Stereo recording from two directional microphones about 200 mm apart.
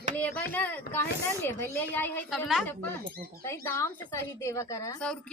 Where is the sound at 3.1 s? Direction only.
50° right (ahead or behind).